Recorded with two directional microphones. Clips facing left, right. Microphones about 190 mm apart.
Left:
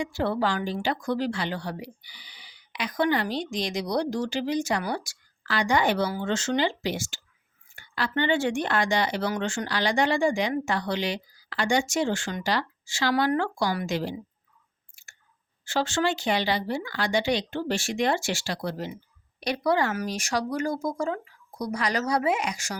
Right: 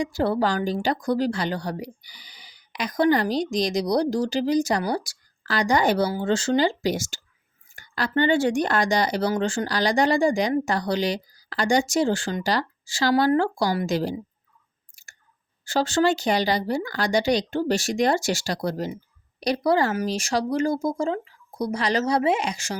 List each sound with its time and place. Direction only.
0.0 s a woman's voice: 40° right (ahead or behind)
14.9 s chewing: 40° right (ahead or behind)
15.6 s a woman's voice: 40° right (ahead or behind)